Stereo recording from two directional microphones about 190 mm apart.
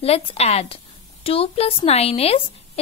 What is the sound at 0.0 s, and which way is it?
A woman's voice, 30° left (ahead or behind).